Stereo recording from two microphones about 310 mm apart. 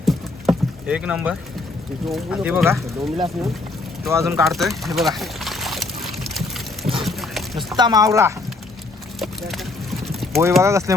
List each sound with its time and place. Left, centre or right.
0.0 s rowboat: centre
2.1 s speech: centre
3.0 s speech: centre
4.0 s a sound: centre
7.8 s speech: centre
9.1 s speech: centre